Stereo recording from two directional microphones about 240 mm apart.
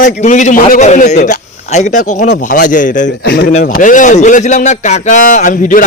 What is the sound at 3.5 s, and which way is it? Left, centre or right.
A man's voice, left.